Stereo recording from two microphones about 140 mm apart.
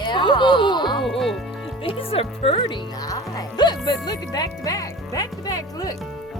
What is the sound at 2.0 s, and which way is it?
Speech, 40° left (ahead or behind).